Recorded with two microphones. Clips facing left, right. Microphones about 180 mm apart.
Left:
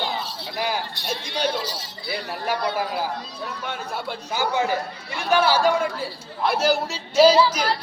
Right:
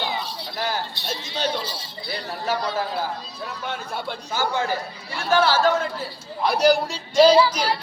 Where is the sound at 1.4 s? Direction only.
10° left (ahead or behind).